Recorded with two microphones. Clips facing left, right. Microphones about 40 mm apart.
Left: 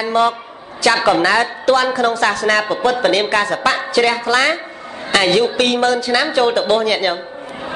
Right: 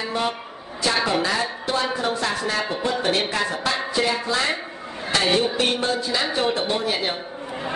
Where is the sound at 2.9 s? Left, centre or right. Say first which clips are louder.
Left 7 dB; left.